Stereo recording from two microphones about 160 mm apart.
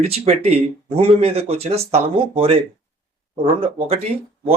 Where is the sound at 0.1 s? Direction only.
40° right (ahead or behind).